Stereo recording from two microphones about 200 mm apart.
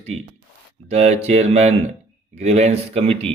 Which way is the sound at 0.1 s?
30° right (ahead or behind).